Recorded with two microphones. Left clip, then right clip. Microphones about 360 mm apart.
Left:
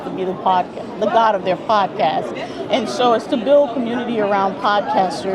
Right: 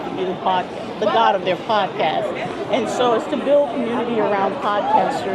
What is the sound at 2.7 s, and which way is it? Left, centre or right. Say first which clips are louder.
Speech: left 2 dB; left.